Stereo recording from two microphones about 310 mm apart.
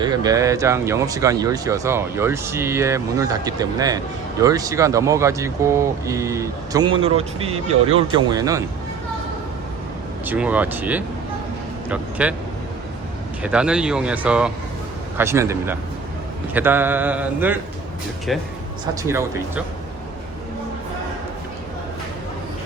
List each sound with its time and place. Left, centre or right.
0.0 s speech: centre
10.2 s speech: centre
13.4 s speech: centre